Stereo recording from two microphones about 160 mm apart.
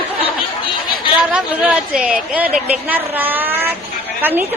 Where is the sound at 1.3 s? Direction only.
5° right (ahead or behind).